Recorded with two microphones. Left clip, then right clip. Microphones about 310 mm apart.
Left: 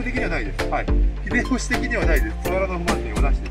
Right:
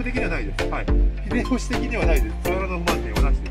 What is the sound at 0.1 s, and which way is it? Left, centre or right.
Music, centre.